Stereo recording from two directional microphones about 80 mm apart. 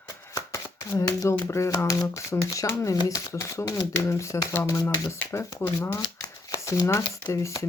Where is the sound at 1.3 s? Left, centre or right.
Left.